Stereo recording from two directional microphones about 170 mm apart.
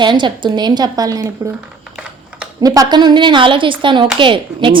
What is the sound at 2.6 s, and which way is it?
A woman's voice, 20° right (ahead or behind).